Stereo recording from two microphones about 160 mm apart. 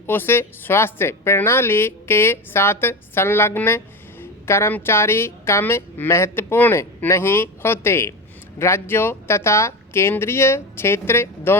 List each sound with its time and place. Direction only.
0.1 s a woman's voice: 15° left (ahead or behind)